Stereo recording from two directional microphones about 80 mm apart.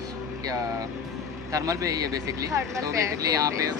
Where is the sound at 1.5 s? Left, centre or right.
Right.